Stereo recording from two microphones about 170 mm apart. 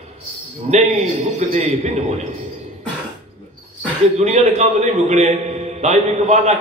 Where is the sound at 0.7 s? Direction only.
40° right (ahead or behind).